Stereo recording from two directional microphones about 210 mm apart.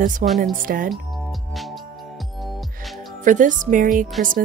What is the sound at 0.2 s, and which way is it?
Speech, 35° right (ahead or behind).